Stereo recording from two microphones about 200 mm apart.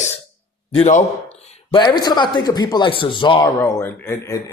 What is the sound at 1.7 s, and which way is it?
Speech, 20° left (ahead or behind).